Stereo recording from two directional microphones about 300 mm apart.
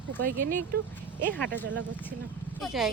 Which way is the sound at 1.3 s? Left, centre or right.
Centre.